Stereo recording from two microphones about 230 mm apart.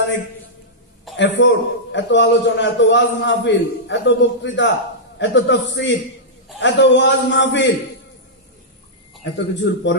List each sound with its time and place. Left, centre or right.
1.1 s a man's voice: left
9.2 s a man's voice: left